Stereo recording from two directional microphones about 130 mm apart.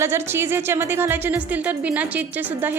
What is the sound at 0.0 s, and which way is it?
Speech, 20° right (ahead or behind).